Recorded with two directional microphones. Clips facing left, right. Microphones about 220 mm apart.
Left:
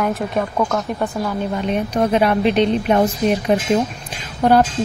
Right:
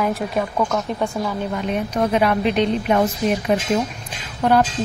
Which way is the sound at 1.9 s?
30° left (ahead or behind).